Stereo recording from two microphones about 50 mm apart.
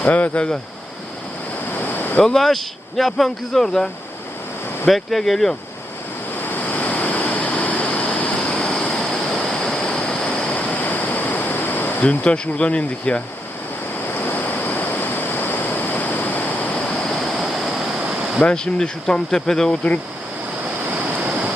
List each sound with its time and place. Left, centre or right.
0.0 s speech: left
1.7 s waves: left
2.2 s speech: centre
4.9 s speech: centre
6.4 s vehicle: left; by 9.1 s centre
9.4 s waves: centre
10.5 s a sound: left
12.2 s speech: left
14.1 s waves: left
16.9 s waves: centre
18.4 s speech: centre
19.7 s speech: left